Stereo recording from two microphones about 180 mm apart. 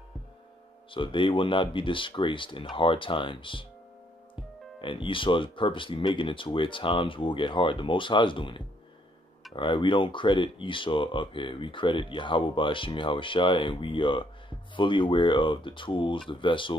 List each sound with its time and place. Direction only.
0.9 s speech: 30° left (ahead or behind)
4.8 s speech: 30° left (ahead or behind)